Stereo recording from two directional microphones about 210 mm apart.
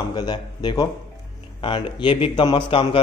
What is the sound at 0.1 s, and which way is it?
A man's voice, 20° left (ahead or behind).